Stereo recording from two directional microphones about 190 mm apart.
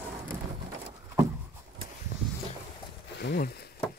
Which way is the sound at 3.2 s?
50° left (ahead or behind).